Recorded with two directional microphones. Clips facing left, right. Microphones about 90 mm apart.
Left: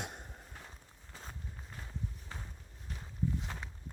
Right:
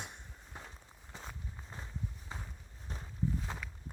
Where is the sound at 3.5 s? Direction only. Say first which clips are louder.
Right 2 dB; 15° right (ahead or behind).